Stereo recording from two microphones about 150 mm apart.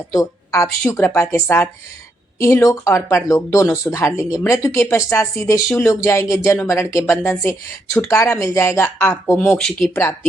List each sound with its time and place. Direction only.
0.1 s speech: 20° left (ahead or behind)
9.5 s speech: 5° left (ahead or behind)